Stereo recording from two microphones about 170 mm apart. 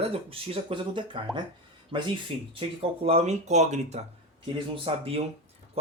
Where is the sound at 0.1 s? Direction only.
35° right (ahead or behind).